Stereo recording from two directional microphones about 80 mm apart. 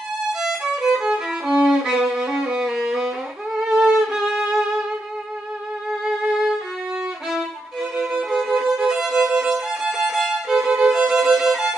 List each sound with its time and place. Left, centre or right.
0.3 s violin: centre
8.0 s violin: centre